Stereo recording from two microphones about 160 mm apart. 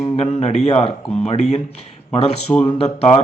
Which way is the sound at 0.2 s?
40° left (ahead or behind).